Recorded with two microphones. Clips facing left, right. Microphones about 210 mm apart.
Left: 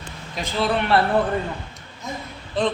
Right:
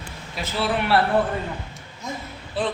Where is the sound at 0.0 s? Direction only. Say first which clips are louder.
Left 1 dB; 5° right (ahead or behind).